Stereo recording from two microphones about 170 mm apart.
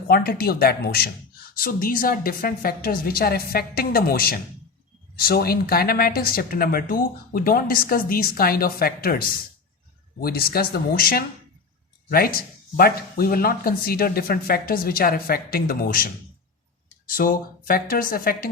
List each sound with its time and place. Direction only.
0.1 s speech: 65° left (ahead or behind)
17.2 s speech: 55° left (ahead or behind)